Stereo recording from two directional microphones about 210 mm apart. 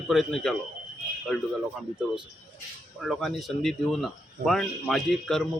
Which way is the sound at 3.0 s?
Centre (ahead or behind).